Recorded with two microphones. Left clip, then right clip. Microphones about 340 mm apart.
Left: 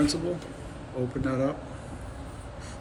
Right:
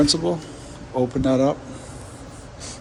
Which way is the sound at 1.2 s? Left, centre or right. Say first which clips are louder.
Right 9 dB; centre.